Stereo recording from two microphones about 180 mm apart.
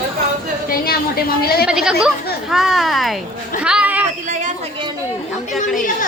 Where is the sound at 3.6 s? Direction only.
5° right (ahead or behind).